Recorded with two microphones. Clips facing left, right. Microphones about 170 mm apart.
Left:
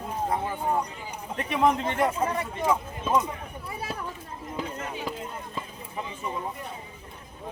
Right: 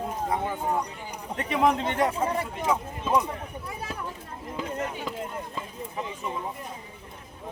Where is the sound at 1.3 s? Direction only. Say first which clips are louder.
Even; 5° left (ahead or behind).